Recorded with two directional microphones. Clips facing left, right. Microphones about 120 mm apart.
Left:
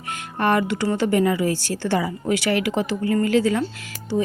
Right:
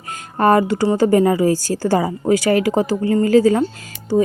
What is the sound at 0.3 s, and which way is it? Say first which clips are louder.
Speech: right 6 dB; 40° right (ahead or behind).